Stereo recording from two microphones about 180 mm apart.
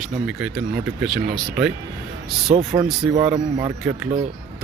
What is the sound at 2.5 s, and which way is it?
Speech, 45° right (ahead or behind).